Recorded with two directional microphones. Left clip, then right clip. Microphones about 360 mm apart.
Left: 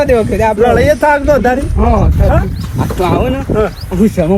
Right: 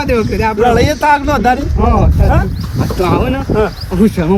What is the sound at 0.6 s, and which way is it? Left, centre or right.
Speech, right.